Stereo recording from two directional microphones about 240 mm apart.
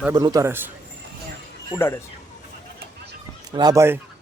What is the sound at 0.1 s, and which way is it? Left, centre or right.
Speech, centre.